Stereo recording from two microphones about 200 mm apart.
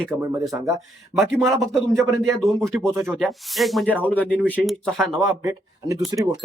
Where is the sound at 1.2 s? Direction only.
Centre (ahead or behind).